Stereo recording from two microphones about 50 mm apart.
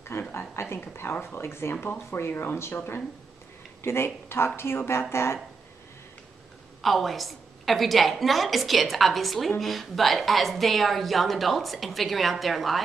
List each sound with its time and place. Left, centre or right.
0.1 s a sound: left
0.6 s a woman's voice: left
6.8 s a woman's voice: centre